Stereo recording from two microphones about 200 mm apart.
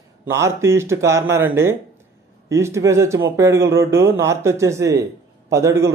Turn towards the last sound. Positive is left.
turn(degrees=-15)  # may be behind; listen again after turning